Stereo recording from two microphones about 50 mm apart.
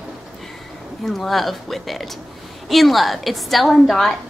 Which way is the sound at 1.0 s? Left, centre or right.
Centre.